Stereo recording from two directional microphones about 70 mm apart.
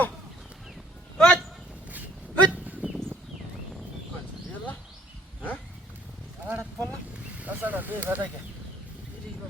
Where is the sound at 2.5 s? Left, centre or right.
Centre.